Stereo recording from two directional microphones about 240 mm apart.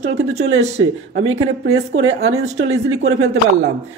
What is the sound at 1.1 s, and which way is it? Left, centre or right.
Speech, right.